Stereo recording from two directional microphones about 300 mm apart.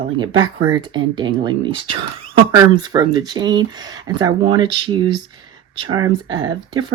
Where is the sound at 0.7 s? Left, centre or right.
Centre.